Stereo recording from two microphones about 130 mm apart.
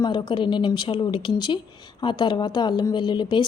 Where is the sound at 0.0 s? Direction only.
35° left (ahead or behind).